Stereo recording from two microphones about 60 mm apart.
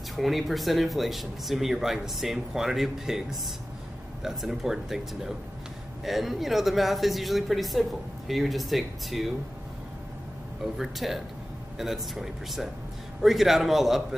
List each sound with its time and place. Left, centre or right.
0.1 s speech: centre
10.6 s speech: centre